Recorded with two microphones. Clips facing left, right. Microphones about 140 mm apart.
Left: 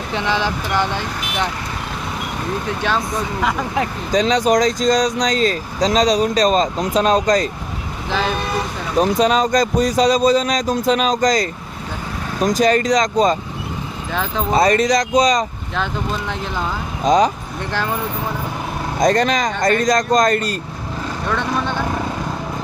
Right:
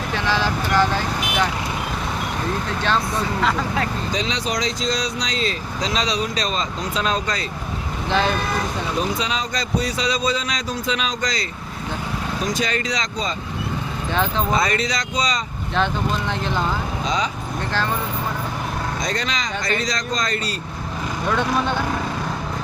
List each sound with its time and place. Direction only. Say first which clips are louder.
0.3 s speech: even; 20° left (ahead or behind)
4.1 s speech: left 9 dB; 45° left (ahead or behind)
9.0 s speech: left 12 dB; 45° left (ahead or behind)
14.1 s speech: right 1 dB; 5° left (ahead or behind)
14.5 s speech: left 7 dB; 40° left (ahead or behind)
17.1 s speech: left 11 dB; 45° left (ahead or behind)
18.9 s speech: left 10 dB; 50° left (ahead or behind)